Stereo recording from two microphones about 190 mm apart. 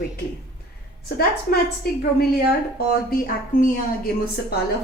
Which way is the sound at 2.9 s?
50° left (ahead or behind).